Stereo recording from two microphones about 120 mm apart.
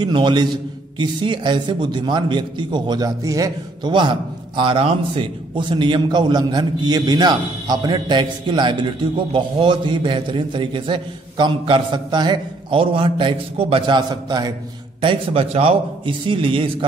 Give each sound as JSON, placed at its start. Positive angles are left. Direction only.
{"t": 0.0, "sound": "a man's voice", "side_deg": -40}
{"t": 3.9, "sound": "a man's voice", "side_deg": -40}
{"t": 15.0, "sound": "a man's voice", "side_deg": -45}